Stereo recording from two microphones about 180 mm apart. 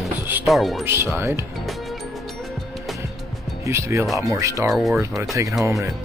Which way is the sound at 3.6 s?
15° right (ahead or behind).